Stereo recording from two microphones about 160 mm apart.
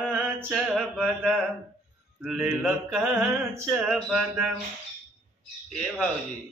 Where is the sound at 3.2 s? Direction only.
15° right (ahead or behind).